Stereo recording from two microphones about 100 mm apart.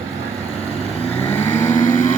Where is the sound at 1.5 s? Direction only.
25° left (ahead or behind).